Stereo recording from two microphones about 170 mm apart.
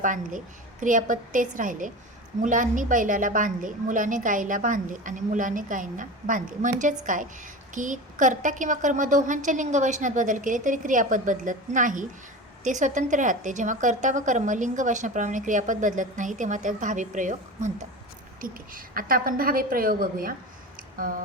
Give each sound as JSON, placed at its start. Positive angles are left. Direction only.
{"t": 0.0, "sound": "a woman's voice", "side_deg": -50}